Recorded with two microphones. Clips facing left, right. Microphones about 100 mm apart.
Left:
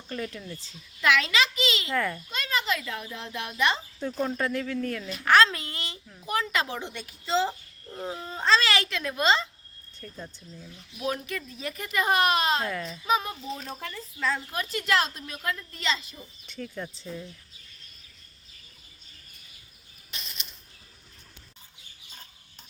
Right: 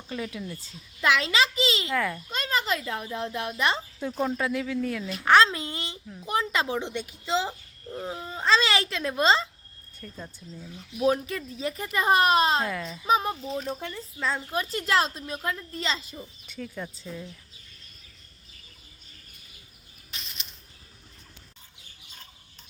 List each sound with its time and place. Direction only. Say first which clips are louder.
0.1 s speech: right 1 dB; 5° right (ahead or behind)
1.0 s a child's voice: even; 30° right (ahead or behind)
1.9 s speech: right 1 dB; centre (ahead or behind)
2.3 s a sound: right 2 dB; 40° right (ahead or behind)
2.8 s speech: right 5 dB; 30° right (ahead or behind)
4.0 s speech: right 1 dB; 5° right (ahead or behind)
5.2 s a child's voice: right 1 dB; 25° right (ahead or behind); by 8.6 s 10° right (ahead or behind)
8.6 s a woman's voice: right 1 dB; 25° right (ahead or behind)
10.0 s speech: even; centre (ahead or behind)
11.0 s speech: right 7 dB; 30° right (ahead or behind)
12.6 s speech: even; centre (ahead or behind)
13.1 s speech: right 3 dB; 35° right (ahead or behind)
13.6 s a woman's voice: right 5 dB; 20° right (ahead or behind); by 16.1 s 35° right (ahead or behind)
16.5 s speech: left 1 dB; 5° right (ahead or behind)